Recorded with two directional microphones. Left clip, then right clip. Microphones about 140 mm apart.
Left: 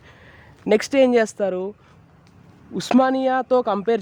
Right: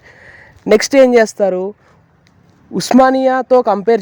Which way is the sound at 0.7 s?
40° right (ahead or behind).